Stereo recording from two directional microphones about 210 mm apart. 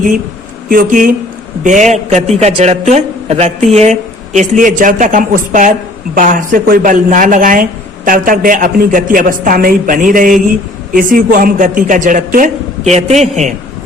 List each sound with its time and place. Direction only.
0.7 s speech: 40° right (ahead or behind)